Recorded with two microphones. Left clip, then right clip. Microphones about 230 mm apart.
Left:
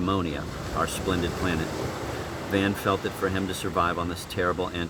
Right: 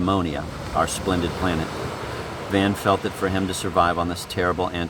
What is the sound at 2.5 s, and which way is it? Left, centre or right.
Speech, right.